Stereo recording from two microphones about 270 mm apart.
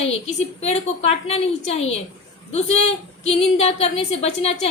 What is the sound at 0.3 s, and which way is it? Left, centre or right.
A woman's voice, left.